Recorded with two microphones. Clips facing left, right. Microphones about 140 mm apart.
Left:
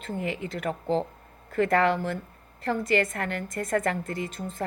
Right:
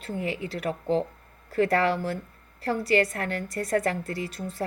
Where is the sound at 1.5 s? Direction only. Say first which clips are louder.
Even; 35° right (ahead or behind).